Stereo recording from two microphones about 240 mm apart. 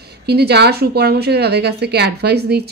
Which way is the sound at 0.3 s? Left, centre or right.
Right.